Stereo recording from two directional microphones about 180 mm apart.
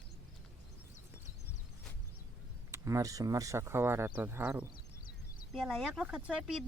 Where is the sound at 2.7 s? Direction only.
15° right (ahead or behind).